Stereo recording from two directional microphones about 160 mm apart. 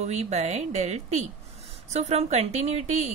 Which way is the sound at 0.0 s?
45° right (ahead or behind).